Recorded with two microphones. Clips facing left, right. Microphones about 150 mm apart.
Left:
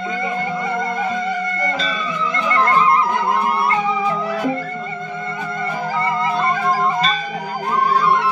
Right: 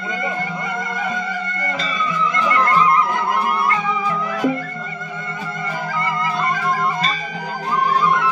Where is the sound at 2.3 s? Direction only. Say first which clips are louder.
Left 2 dB; 30° left (ahead or behind).